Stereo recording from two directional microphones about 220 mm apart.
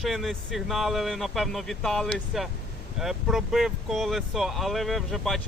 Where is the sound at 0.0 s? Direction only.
Centre (ahead or behind).